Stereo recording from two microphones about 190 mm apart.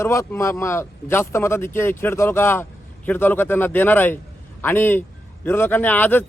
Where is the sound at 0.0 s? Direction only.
15° left (ahead or behind).